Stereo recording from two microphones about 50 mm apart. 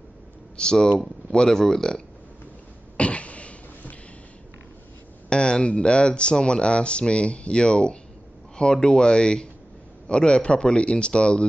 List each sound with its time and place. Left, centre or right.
0.6 s speech: centre
3.0 s a sound: left
5.3 s speech: centre